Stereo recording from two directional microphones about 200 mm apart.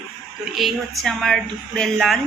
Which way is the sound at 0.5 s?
Centre (ahead or behind).